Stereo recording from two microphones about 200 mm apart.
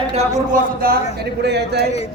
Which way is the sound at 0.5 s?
50° right (ahead or behind).